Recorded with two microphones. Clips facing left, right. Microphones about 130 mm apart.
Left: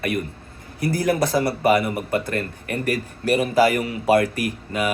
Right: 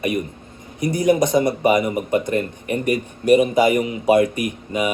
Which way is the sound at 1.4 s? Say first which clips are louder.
Right 2 dB; 15° right (ahead or behind).